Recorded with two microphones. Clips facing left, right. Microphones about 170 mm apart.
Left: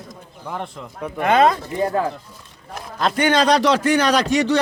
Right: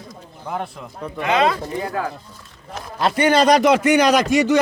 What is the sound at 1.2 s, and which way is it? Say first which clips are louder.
Speech: left 3 dB; 45° left (ahead or behind).